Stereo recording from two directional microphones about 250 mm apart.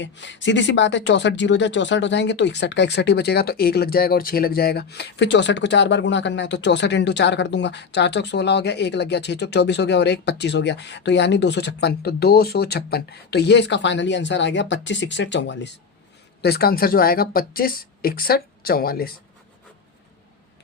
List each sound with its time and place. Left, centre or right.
0.0 s speech: left